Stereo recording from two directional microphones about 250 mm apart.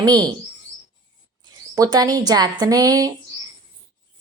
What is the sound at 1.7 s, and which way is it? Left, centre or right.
Speech, centre.